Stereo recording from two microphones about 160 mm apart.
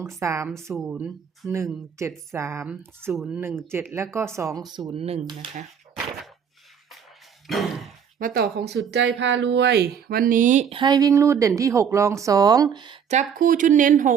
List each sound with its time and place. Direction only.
0.0 s speech: 20° right (ahead or behind)
0.7 s speech: centre (ahead or behind)
0.9 s speech: 15° right (ahead or behind)
4.9 s speech: 40° right (ahead or behind)
5.2 s a woman's voice: 25° right (ahead or behind)
7.4 s a sound: centre (ahead or behind)
8.2 s speech: 75° right (ahead or behind); by 10.7 s 55° right (ahead or behind)
10.7 s a woman's voice: 30° right (ahead or behind)
13.1 s speech: 55° right (ahead or behind)